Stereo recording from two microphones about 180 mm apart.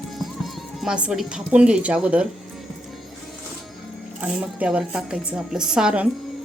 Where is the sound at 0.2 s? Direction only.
Centre (ahead or behind).